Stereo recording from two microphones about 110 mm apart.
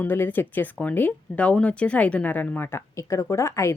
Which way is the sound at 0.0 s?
20° left (ahead or behind).